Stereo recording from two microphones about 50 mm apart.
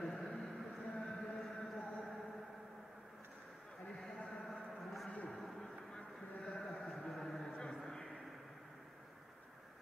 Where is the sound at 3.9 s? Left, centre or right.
Centre.